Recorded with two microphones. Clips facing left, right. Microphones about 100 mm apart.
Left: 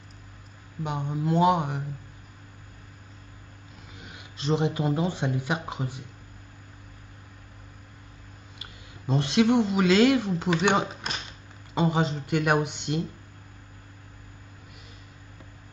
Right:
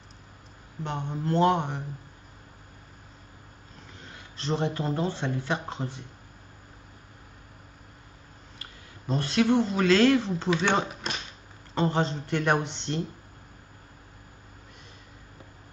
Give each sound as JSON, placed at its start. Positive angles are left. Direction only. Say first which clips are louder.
{"t": 0.8, "sound": "speech", "louder": "left 2 dB", "side_deg": 10}
{"t": 3.9, "sound": "speech", "louder": "left 1 dB", "side_deg": 15}
{"t": 8.5, "sound": "speech", "louder": "even", "side_deg": 20}